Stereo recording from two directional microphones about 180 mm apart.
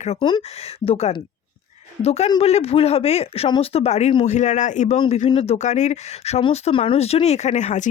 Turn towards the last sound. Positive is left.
turn(degrees=40)  # may be behind; listen again after turning